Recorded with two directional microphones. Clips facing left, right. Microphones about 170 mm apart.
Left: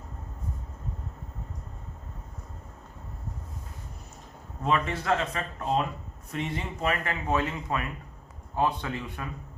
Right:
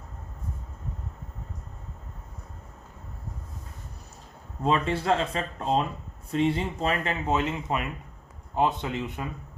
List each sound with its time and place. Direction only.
4.6 s speech: 30° right (ahead or behind)